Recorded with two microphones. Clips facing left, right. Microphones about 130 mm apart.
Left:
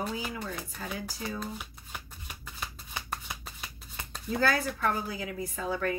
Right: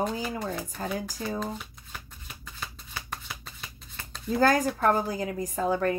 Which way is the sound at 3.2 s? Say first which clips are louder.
Even; 15° left (ahead or behind).